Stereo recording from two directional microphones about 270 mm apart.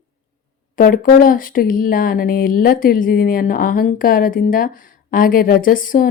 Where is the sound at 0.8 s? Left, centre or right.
Left.